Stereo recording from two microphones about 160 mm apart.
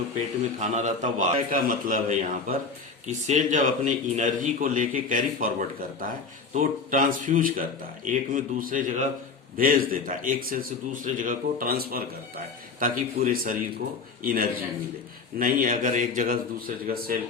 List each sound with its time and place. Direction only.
0.6 s a man's voice: 50° right (ahead or behind)